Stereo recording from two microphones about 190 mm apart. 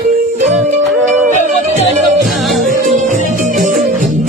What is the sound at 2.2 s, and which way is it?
Music, centre (ahead or behind).